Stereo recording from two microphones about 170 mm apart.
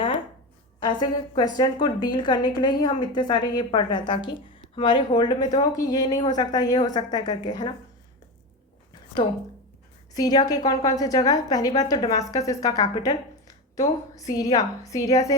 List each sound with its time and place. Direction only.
0.8 s a woman's voice: 25° left (ahead or behind)
10.2 s a woman's voice: 20° left (ahead or behind)